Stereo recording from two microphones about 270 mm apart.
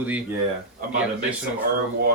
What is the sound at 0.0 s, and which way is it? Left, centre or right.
Speech, centre.